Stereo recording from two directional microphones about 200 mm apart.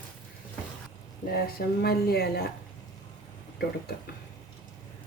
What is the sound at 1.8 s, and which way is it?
Speech, 50° left (ahead or behind).